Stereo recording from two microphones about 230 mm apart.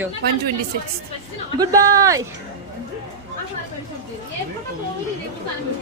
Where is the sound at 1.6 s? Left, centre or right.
Centre.